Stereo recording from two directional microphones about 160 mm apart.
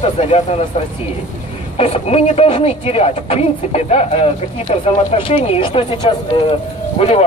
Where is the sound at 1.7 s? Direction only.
40° left (ahead or behind).